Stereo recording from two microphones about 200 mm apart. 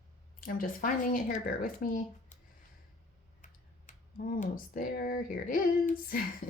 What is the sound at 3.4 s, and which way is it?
Speech, 40° left (ahead or behind).